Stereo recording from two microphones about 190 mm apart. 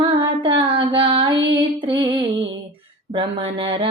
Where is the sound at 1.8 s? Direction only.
25° right (ahead or behind).